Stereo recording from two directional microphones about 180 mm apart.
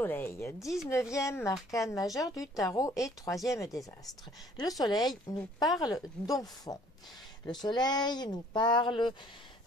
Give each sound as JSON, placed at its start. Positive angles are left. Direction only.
{"t": 0.0, "sound": "a woman's voice", "side_deg": 10}